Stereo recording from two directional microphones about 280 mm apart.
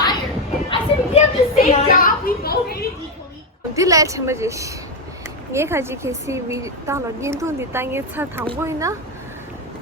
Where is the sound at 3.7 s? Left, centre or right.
Centre.